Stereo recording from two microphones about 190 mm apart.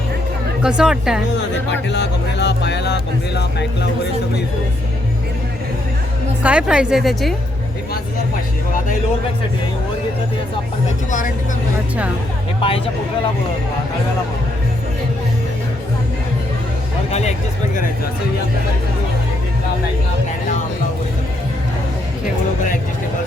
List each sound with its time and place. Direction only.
0.6 s a woman's voice: 5° right (ahead or behind)
1.9 s speech: 65° left (ahead or behind)
6.4 s a woman's voice: 5° right (ahead or behind)
12.6 s speech: 30° left (ahead or behind)
17.1 s a sound: 35° left (ahead or behind)